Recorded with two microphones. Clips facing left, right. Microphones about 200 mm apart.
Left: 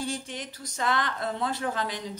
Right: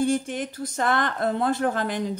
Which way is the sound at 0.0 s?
55° right (ahead or behind).